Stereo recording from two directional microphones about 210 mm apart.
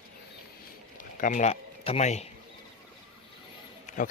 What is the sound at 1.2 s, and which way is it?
Speech, 35° left (ahead or behind).